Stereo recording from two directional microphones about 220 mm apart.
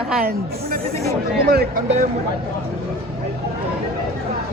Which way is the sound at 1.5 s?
45° right (ahead or behind).